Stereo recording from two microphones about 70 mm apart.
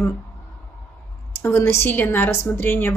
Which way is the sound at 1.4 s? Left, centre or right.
Left.